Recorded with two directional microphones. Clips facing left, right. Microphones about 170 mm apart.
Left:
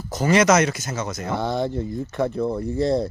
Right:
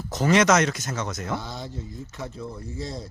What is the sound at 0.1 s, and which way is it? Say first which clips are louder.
Speech: left 2 dB; centre (ahead or behind).